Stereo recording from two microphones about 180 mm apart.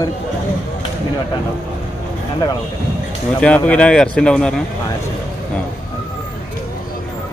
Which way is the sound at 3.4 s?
5° left (ahead or behind).